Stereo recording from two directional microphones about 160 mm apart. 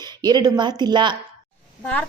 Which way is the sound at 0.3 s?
25° right (ahead or behind).